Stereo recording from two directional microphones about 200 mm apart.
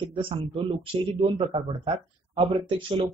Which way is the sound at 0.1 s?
25° right (ahead or behind).